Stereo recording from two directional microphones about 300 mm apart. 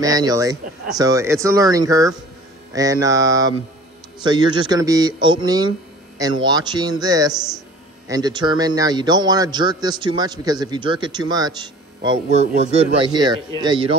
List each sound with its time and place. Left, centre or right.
0.0 s a man's voice: centre